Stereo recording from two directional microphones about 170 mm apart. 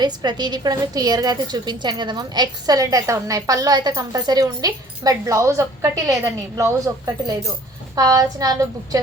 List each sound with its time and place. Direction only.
0.0 s a woman's voice: 25° right (ahead or behind)